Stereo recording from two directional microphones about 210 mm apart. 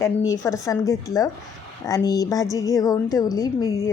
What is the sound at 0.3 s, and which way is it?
A woman's voice, 15° left (ahead or behind).